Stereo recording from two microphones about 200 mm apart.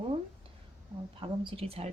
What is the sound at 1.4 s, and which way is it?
Speech, 30° right (ahead or behind).